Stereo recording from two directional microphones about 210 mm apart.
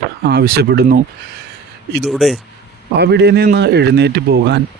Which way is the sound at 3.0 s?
55° right (ahead or behind).